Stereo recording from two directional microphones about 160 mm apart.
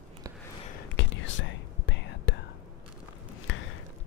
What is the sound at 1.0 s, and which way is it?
Whispering, 90° left.